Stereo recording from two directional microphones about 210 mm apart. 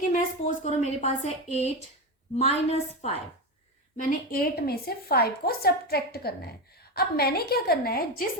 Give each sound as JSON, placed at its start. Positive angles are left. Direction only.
{"t": 0.1, "sound": "a woman's voice", "side_deg": 35}
{"t": 3.9, "sound": "a woman's voice", "side_deg": 45}